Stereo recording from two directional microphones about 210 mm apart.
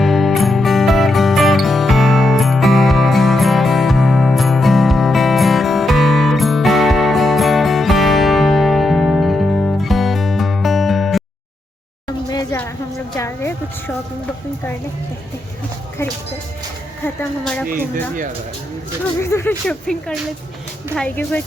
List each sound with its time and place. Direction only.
0.0 s music: centre (ahead or behind)
12.0 s a sound: 20° left (ahead or behind)
17.2 s speech: 5° left (ahead or behind)
19.2 s speech: 10° left (ahead or behind)